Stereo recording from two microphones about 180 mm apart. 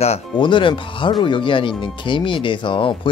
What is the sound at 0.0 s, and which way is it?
Speech, 30° left (ahead or behind).